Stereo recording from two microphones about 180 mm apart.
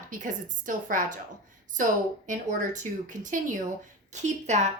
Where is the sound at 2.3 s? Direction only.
45° right (ahead or behind).